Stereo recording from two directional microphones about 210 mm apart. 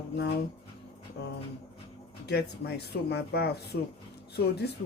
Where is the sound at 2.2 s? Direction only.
50° left (ahead or behind).